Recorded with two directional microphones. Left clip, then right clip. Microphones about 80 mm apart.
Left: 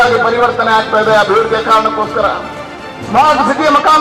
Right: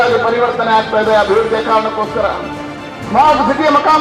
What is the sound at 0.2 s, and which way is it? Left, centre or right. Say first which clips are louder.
A man's voice: left 2 dB; left.